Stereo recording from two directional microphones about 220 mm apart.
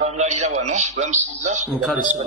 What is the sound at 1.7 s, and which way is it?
Speech, 5° right (ahead or behind).